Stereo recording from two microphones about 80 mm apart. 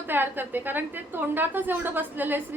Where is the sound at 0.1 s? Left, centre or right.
Right.